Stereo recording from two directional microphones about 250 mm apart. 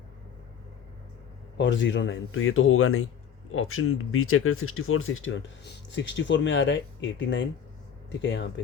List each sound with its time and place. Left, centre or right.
1.5 s speech: left